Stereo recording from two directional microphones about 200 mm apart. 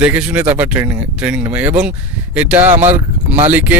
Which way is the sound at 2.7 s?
35° right (ahead or behind).